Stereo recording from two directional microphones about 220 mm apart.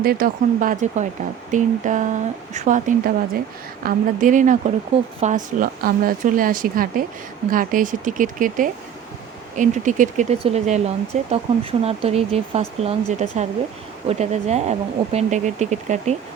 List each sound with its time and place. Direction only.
0.0 s speech: 40° right (ahead or behind)